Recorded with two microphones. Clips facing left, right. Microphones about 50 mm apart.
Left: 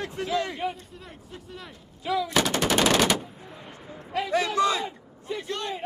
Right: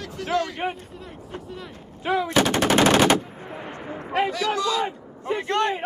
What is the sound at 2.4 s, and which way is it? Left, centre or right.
Machine gun, right.